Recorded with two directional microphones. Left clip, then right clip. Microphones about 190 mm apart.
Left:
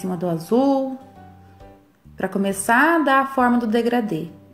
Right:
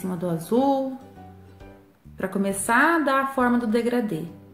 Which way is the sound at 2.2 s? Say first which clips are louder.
Left 3 dB; 15° left (ahead or behind).